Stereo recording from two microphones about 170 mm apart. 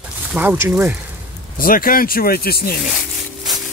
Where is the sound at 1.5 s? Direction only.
55° left (ahead or behind).